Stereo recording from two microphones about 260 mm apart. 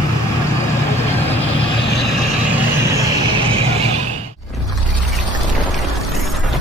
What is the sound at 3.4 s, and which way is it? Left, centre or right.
Music, right.